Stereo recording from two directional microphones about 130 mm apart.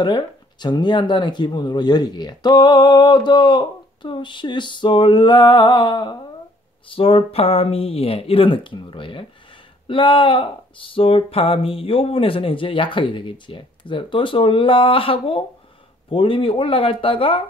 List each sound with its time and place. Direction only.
0.0 s speech: 35° left (ahead or behind)